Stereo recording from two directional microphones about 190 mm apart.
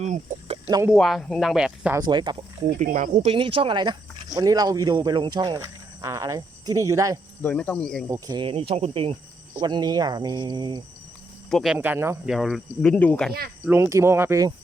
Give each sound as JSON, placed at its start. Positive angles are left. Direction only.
{"t": 0.0, "sound": "speech", "side_deg": -40}
{"t": 0.9, "sound": "speech", "side_deg": 0}
{"t": 2.0, "sound": "speech", "side_deg": -25}
{"t": 2.7, "sound": "speech", "side_deg": -40}
{"t": 7.4, "sound": "speech", "side_deg": 5}
{"t": 8.1, "sound": "speech", "side_deg": -20}
{"t": 11.5, "sound": "speech", "side_deg": -5}
{"t": 13.7, "sound": "speech", "side_deg": -15}